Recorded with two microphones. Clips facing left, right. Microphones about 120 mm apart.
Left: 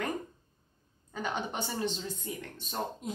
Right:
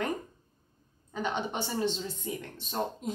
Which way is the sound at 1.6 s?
Centre (ahead or behind).